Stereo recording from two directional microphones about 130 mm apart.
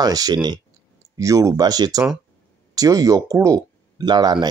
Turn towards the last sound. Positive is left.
turn(degrees=-35)  # may be behind; listen again after turning